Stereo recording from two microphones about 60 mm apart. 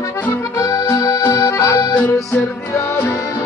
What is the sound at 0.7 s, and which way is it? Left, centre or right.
Accordion, left.